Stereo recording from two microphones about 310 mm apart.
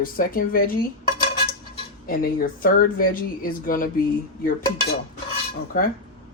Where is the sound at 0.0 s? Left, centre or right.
Left.